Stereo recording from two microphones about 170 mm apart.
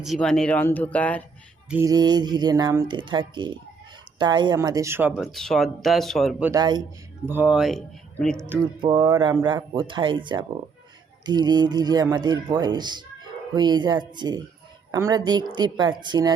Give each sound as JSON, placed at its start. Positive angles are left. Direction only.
{"t": 0.0, "sound": "speech", "side_deg": 0}
{"t": 1.7, "sound": "speech", "side_deg": -20}
{"t": 6.4, "sound": "speech", "side_deg": -20}
{"t": 7.3, "sound": "speech", "side_deg": -10}
{"t": 8.8, "sound": "speech", "side_deg": -30}